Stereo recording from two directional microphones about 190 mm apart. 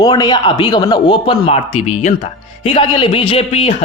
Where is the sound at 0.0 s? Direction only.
20° left (ahead or behind).